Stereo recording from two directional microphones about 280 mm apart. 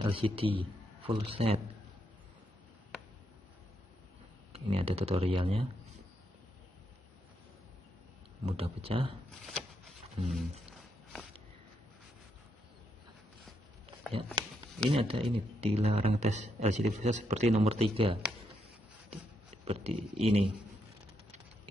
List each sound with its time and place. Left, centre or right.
0.0 s a man's voice: centre
4.5 s speech: right
8.5 s speech: right
9.3 s a sound: centre
14.9 s speech: centre
19.0 s a sound: right